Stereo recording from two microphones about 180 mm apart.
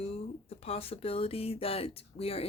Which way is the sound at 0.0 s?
35° left (ahead or behind).